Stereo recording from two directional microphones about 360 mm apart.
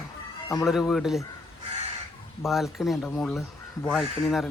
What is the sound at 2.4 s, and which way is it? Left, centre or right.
Speech, centre.